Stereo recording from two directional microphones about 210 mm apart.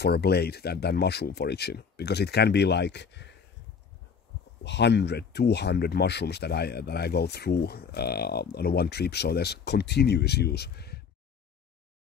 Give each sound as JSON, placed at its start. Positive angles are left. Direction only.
{"t": 0.0, "sound": "speech", "side_deg": 50}
{"t": 4.6, "sound": "speech", "side_deg": 55}